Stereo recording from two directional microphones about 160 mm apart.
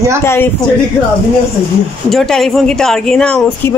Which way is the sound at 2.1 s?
Centre (ahead or behind).